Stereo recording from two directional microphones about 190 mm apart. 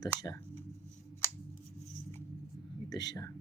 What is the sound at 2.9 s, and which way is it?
Speech, 20° left (ahead or behind).